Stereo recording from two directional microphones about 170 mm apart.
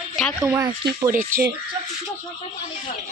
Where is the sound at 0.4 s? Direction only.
15° right (ahead or behind).